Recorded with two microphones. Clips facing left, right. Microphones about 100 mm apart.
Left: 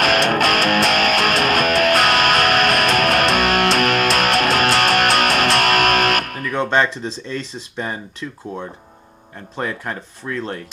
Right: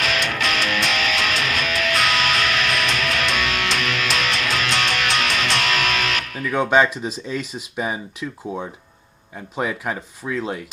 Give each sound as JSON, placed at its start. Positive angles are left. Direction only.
{"t": 0.0, "sound": "music", "side_deg": 50}
{"t": 6.5, "sound": "speech", "side_deg": -10}